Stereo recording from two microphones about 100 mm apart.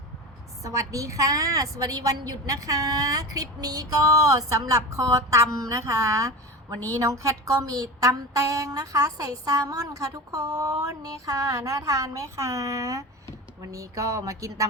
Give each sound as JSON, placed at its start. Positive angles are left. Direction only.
{"t": 0.6, "sound": "speech", "side_deg": -30}